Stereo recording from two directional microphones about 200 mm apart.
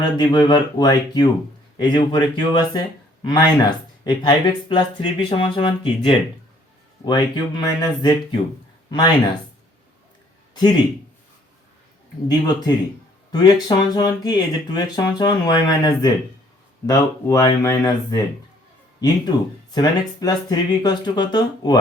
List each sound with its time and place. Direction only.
0.0 s speech: 20° left (ahead or behind)
10.5 s speech: 20° left (ahead or behind)
12.3 s speech: 20° left (ahead or behind)